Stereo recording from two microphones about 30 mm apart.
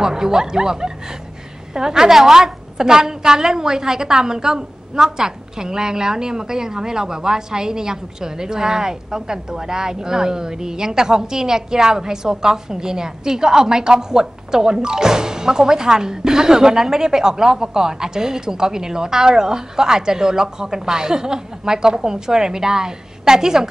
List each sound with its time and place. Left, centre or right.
0.0 s a woman's voice: right